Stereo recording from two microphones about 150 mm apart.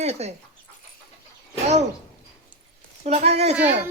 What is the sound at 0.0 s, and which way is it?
Speech, 45° right (ahead or behind).